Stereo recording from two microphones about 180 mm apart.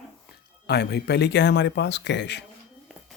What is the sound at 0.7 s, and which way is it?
Speech, 65° left (ahead or behind).